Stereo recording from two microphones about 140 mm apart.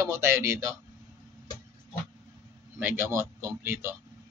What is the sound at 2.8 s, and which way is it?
Speech, 15° right (ahead or behind).